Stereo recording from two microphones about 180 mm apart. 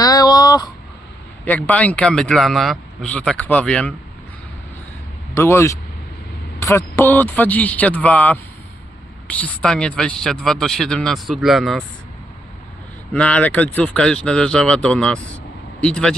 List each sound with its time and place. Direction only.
0.0 s a sound: 20° left (ahead or behind)
1.5 s speech: 10° left (ahead or behind)
5.3 s a man's voice: 15° left (ahead or behind); by 11.8 s centre (ahead or behind)
13.1 s speech: 5° left (ahead or behind)